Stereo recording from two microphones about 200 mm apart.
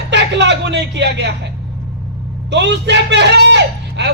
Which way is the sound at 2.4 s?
60° right (ahead or behind).